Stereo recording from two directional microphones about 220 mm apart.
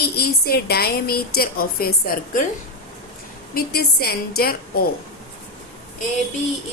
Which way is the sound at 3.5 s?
45° left (ahead or behind).